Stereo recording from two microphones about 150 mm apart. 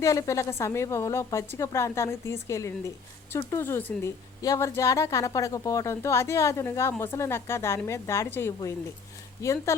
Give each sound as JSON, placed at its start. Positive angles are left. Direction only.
{"t": 0.0, "sound": "a woman's voice", "side_deg": 20}